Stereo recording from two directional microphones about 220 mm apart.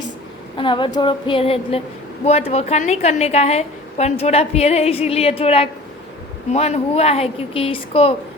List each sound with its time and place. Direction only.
0.5 s a woman's voice: 20° left (ahead or behind)